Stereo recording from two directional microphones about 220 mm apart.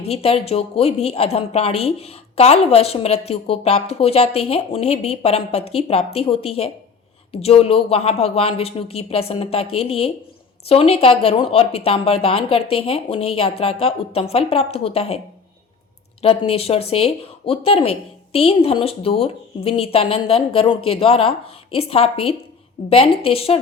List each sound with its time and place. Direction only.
0.0 s a woman's voice: 25° left (ahead or behind)
16.5 s a woman's voice: 25° left (ahead or behind)